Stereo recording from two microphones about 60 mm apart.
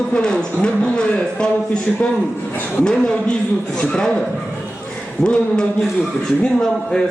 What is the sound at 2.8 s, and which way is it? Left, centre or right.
Speech, centre.